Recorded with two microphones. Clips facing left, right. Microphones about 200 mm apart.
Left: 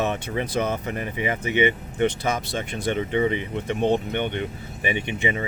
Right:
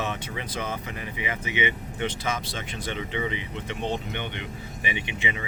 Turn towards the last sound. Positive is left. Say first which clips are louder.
# left 6 dB
turn(degrees=45)  # may be behind; listen again after turning